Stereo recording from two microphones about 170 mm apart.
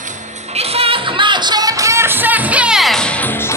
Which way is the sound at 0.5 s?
35° right (ahead or behind).